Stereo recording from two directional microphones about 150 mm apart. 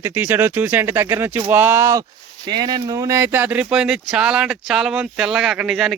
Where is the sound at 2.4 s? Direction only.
25° right (ahead or behind).